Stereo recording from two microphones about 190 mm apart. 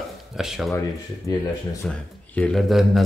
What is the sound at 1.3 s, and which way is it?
Speech, 15° left (ahead or behind).